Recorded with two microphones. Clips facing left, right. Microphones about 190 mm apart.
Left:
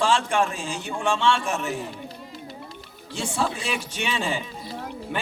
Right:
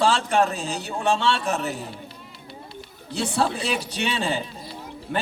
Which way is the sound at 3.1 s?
35° right (ahead or behind).